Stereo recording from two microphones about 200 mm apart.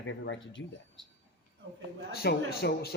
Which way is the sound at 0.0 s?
70° left (ahead or behind).